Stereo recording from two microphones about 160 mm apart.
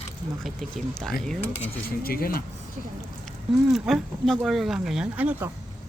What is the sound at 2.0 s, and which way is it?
Speech, 70° left (ahead or behind).